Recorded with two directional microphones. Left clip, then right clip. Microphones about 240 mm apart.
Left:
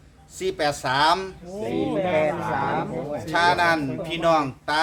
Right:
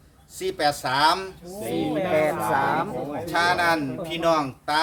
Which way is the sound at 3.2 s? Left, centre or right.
Centre.